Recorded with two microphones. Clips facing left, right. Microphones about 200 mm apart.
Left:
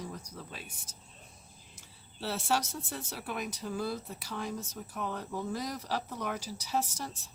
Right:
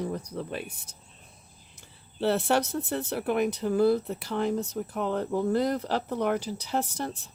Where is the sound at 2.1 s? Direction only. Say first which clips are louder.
Right 8 dB; 60° right (ahead or behind).